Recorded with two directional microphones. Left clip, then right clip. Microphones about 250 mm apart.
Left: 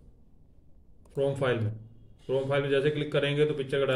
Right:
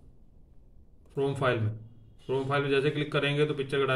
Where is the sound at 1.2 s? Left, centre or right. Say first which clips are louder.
Even; centre.